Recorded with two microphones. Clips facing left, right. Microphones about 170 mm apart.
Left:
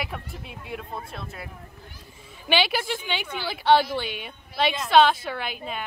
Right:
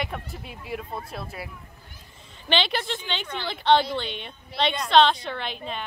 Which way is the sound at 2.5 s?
5° left (ahead or behind).